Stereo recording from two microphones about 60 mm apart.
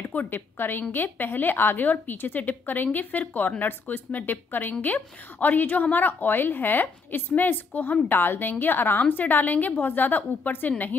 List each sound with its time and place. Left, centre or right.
0.1 s a woman's voice: left